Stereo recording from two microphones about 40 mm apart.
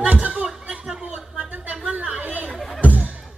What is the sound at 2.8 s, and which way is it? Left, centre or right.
Music, right.